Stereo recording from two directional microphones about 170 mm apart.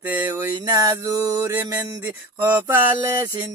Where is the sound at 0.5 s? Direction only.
20° right (ahead or behind).